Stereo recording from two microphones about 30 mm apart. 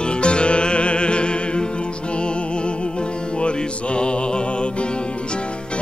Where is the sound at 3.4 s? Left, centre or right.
Left.